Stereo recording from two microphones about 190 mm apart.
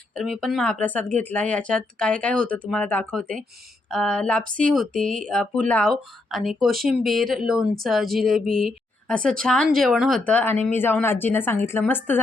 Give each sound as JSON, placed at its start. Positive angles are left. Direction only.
{"t": 0.2, "sound": "speech", "side_deg": 0}